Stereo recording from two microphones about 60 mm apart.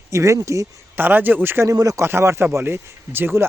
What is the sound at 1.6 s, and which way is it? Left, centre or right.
Speech, right.